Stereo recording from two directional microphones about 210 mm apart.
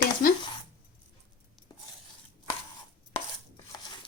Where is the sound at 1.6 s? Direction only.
Centre (ahead or behind).